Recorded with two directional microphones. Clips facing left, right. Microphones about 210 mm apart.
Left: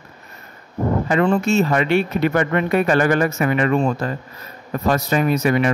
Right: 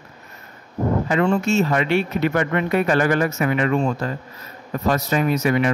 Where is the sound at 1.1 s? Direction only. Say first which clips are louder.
Left 2 dB; 55° left (ahead or behind).